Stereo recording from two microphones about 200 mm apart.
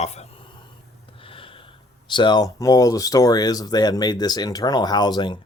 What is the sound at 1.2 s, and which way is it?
Gasp, 25° left (ahead or behind).